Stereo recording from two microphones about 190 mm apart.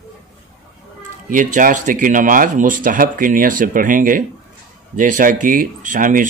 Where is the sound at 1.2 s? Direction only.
45° right (ahead or behind).